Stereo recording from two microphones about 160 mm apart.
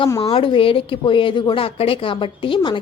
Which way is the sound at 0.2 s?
35° left (ahead or behind).